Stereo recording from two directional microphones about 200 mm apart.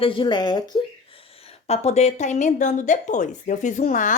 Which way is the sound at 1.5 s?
30° left (ahead or behind).